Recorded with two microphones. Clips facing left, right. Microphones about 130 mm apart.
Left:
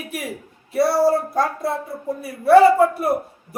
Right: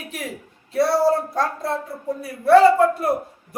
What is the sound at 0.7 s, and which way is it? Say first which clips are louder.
A man's voice: left 1 dB; 5° left (ahead or behind).